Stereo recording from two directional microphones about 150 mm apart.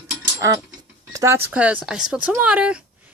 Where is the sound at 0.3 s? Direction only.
25° right (ahead or behind).